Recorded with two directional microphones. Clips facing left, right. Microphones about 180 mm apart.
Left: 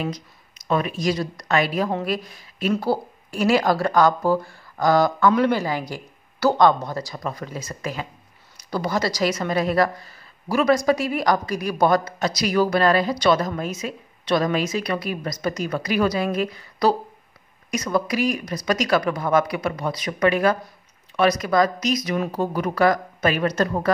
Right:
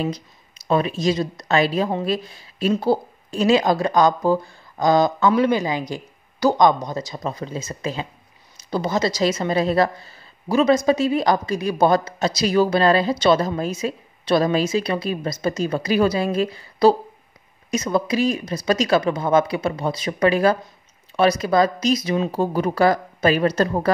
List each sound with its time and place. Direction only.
0.0 s speech: 30° right (ahead or behind)